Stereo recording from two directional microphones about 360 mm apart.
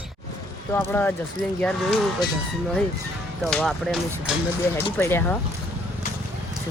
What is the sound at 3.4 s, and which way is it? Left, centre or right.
Speech, centre.